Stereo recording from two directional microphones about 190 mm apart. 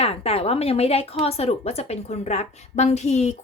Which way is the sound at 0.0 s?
30° left (ahead or behind).